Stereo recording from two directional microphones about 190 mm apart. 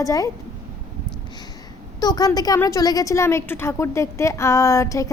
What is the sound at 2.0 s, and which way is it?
A woman's voice, 20° left (ahead or behind).